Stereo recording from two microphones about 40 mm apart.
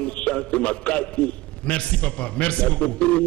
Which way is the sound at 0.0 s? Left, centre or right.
Left.